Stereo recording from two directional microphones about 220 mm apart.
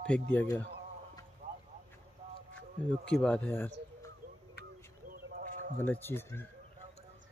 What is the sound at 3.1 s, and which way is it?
Speech, 5° left (ahead or behind).